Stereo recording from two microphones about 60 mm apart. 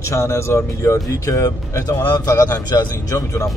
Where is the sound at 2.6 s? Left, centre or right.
Left.